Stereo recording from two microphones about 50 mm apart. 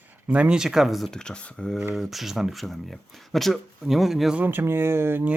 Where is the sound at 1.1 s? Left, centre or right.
Centre.